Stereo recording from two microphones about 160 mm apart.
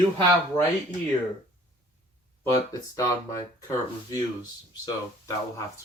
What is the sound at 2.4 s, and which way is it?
Speech, 20° left (ahead or behind).